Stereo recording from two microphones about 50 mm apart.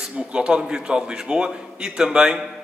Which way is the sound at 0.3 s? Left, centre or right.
Centre.